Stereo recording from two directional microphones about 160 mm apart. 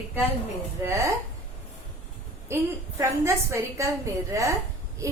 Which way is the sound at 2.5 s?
15° right (ahead or behind).